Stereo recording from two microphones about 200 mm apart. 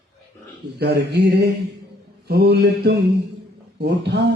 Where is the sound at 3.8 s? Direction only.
55° right (ahead or behind).